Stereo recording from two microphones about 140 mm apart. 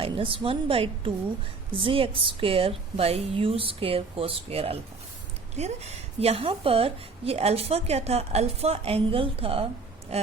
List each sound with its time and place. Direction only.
0.0 s a woman's voice: 40° right (ahead or behind)